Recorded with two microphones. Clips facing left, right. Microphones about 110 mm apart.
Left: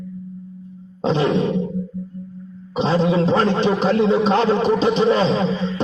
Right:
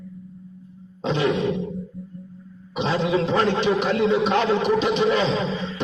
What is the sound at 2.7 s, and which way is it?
A man's voice, 35° left (ahead or behind).